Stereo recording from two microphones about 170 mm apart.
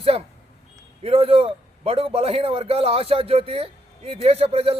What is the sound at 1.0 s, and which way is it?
A man's voice, 35° right (ahead or behind).